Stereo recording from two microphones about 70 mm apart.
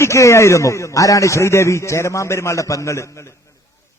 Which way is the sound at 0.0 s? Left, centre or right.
Left.